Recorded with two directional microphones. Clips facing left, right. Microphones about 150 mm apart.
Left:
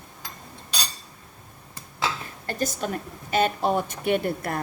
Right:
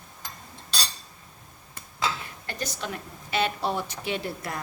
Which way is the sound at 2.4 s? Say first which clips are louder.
Left 7 dB; 45° left (ahead or behind).